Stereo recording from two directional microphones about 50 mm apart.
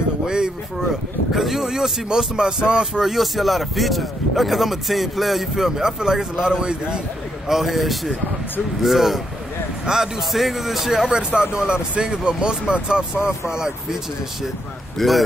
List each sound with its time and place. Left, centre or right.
0.3 s speech: centre
3.2 s speech: centre
5.8 s speech: centre
7.4 s speech: centre
15.0 s speech: centre